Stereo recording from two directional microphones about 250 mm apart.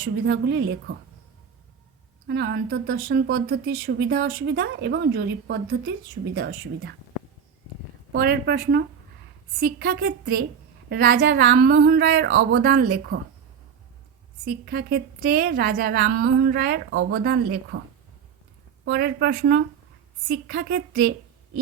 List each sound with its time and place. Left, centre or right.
0.0 s a woman's voice: right
2.2 s speech: right
8.1 s speech: right
14.4 s speech: right
18.9 s speech: right